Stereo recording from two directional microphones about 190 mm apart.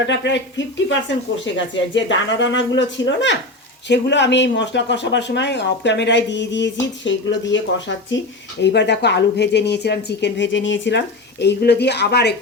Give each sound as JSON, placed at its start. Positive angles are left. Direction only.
{"t": 0.1, "sound": "speech", "side_deg": 70}